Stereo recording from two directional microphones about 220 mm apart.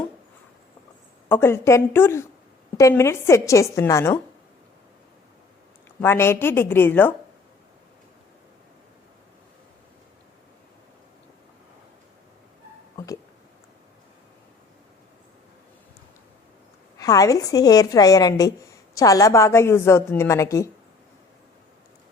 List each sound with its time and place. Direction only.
1.3 s a woman's voice: 10° left (ahead or behind)
6.0 s a woman's voice: 10° left (ahead or behind)
17.0 s a woman's voice: 15° left (ahead or behind)